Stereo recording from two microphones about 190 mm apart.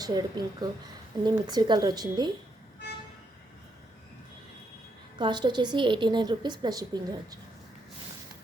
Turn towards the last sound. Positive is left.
turn(degrees=-20)  # may be behind; listen again after turning